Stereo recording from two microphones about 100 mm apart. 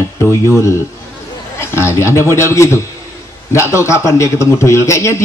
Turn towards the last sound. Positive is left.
turn(degrees=30)  # may be behind; listen again after turning